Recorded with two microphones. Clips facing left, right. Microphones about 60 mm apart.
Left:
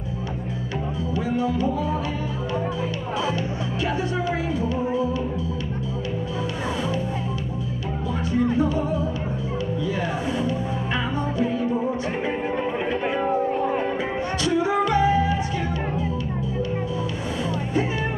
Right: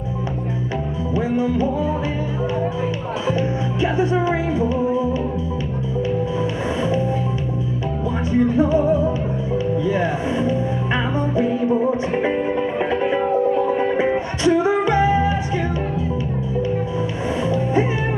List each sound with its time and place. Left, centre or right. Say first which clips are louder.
1.1 s music: right 5 dB; right
3.3 s music: right 5 dB; right
8.3 s music: right 5 dB; right
13.9 s music: right 6 dB; right
17.4 s music: right 6 dB; right